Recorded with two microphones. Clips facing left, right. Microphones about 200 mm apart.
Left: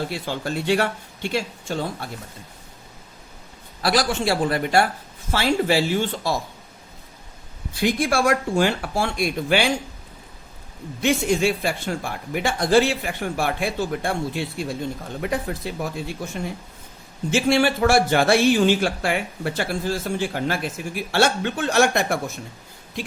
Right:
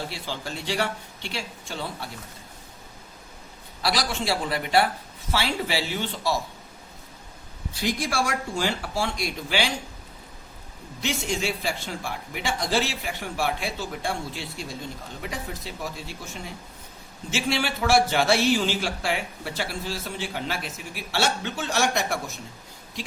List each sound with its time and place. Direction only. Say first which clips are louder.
0.1 s speech: left 7 dB; 55° left (ahead or behind)
3.8 s speech: left 5 dB; 50° left (ahead or behind)
7.7 s speech: left 6 dB; 55° left (ahead or behind)
11.0 s speech: left 8 dB; 55° left (ahead or behind)